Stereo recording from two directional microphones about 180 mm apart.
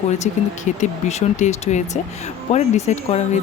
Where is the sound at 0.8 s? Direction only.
40° left (ahead or behind).